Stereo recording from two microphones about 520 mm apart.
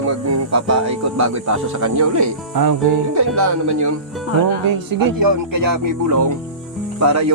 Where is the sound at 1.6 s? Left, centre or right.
Right.